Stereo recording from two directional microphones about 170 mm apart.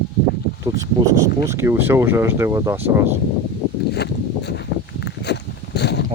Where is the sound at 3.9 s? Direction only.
80° left.